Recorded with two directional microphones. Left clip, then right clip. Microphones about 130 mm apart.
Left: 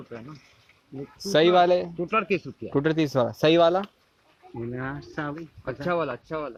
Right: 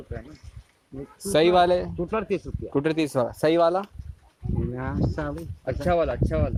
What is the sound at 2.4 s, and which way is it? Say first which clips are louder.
Speech: even; 20° right (ahead or behind).